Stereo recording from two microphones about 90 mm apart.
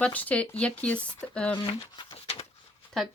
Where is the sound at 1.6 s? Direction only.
65° left (ahead or behind).